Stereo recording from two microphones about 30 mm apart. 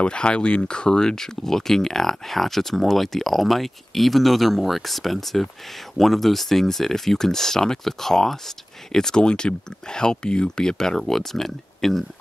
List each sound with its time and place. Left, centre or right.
0.0 s speech: left
11.0 s speech: centre